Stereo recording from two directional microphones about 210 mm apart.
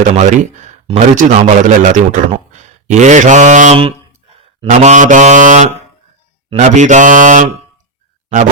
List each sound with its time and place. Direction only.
0.2 s speech: 35° right (ahead or behind)